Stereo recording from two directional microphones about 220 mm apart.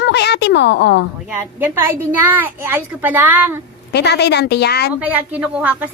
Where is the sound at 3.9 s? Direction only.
50° left (ahead or behind).